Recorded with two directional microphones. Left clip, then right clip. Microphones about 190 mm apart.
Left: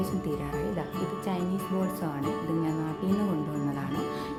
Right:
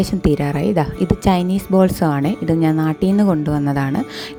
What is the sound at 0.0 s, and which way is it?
Speech, 50° right (ahead or behind).